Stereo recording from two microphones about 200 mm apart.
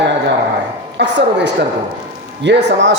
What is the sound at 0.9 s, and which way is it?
A woman's voice, 60° right (ahead or behind).